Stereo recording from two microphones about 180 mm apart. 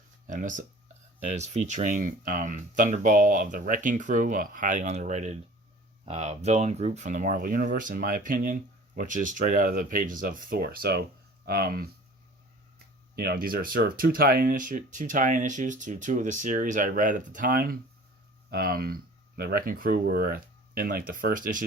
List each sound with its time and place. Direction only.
0.3 s speech: 45° right (ahead or behind)
13.1 s speech: 55° right (ahead or behind)